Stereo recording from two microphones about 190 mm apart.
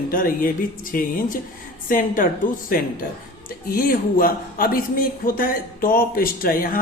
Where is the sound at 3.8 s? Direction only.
50° left (ahead or behind).